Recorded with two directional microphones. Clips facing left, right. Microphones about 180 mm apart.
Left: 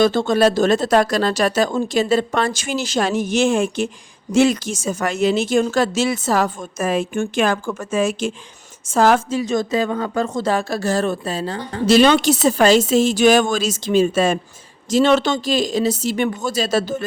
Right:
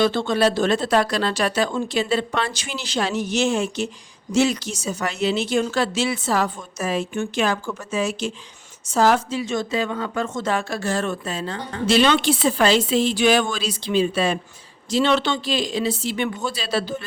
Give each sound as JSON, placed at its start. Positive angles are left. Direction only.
{"t": 0.0, "sound": "a woman's voice", "side_deg": 45}